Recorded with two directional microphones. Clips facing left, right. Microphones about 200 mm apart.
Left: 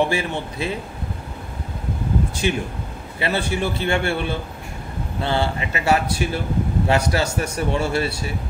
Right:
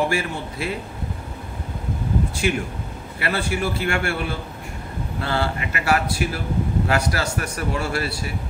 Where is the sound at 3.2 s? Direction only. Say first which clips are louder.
Left 2 dB; 20° left (ahead or behind).